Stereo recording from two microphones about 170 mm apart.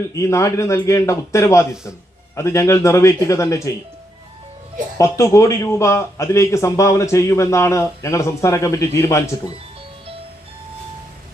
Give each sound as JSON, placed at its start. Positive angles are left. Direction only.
{"t": 0.1, "sound": "a man's voice", "side_deg": 15}
{"t": 4.9, "sound": "a man's voice", "side_deg": 20}